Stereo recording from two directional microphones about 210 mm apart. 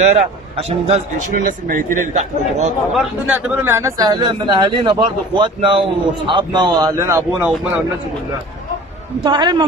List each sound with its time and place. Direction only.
0.0 s speech: 30° right (ahead or behind)
2.9 s speech: 5° right (ahead or behind)
9.2 s speech: 20° right (ahead or behind)